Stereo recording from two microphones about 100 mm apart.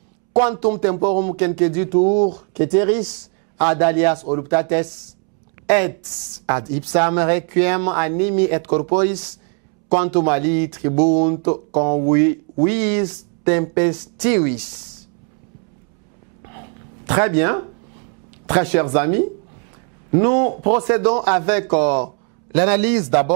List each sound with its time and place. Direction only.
0.3 s speech: 20° right (ahead or behind)
16.5 s a sound: 20° right (ahead or behind)
17.4 s a man's voice: 15° right (ahead or behind)